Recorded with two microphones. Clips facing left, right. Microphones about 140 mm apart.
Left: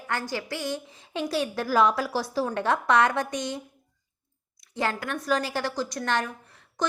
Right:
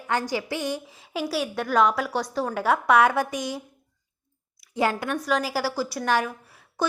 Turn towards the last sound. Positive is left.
turn(degrees=-10)  # may be behind; listen again after turning